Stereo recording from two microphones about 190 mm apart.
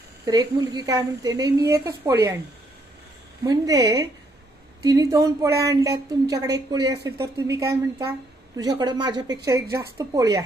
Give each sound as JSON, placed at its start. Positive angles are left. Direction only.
{"t": 0.2, "sound": "a woman's voice", "side_deg": -20}
{"t": 3.4, "sound": "a woman's voice", "side_deg": -20}